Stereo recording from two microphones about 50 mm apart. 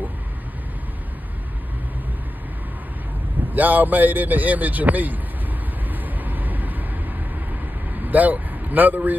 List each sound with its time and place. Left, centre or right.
3.5 s a man's voice: right
5.9 s vehicle: right
8.1 s speech: right